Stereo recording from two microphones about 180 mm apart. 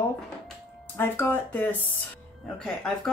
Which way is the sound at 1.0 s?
10° left (ahead or behind).